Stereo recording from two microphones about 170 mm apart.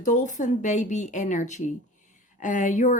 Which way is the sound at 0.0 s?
50° left (ahead or behind).